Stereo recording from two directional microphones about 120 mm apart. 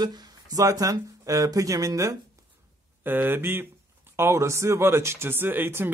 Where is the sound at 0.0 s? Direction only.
35° right (ahead or behind).